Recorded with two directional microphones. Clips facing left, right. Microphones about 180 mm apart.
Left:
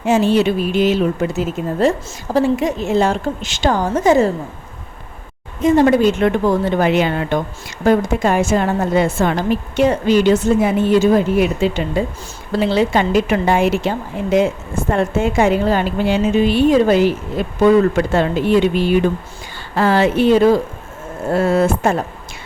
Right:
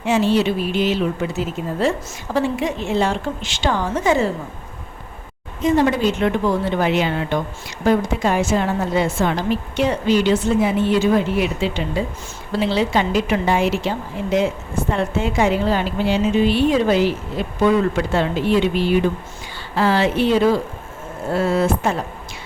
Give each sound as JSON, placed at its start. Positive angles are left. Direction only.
{"t": 0.0, "sound": "speech", "side_deg": 45}
{"t": 5.6, "sound": "speech", "side_deg": 50}